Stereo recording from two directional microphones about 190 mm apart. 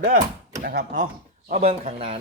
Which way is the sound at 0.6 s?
50° right (ahead or behind).